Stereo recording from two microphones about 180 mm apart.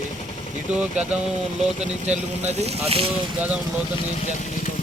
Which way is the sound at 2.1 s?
35° right (ahead or behind).